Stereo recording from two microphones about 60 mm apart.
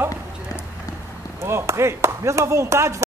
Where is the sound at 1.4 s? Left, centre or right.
Right.